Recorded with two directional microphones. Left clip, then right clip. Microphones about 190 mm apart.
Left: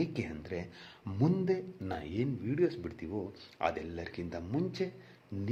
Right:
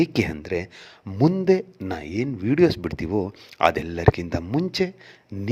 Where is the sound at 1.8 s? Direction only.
35° right (ahead or behind).